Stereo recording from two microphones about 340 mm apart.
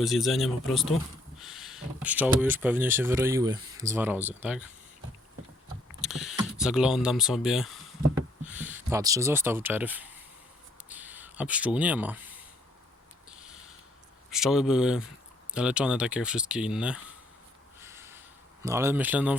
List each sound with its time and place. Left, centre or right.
0.0 s speech: centre
4.2 s speech: centre
4.4 s speech: centre
6.0 s speech: centre
10.8 s a sound: centre
13.3 s a sound: centre
14.3 s speech: centre
17.7 s a sound: centre
18.6 s speech: centre